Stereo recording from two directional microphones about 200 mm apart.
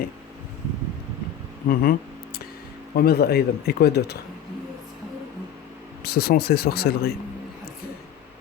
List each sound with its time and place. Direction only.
1.6 s a sound: 45° left (ahead or behind)
2.9 s speech: 50° left (ahead or behind)
6.0 s speech: 50° left (ahead or behind)